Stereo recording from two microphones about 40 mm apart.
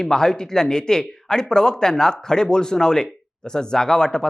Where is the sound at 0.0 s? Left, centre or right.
Centre.